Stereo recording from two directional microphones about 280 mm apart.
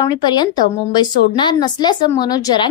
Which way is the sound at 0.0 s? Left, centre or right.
Centre.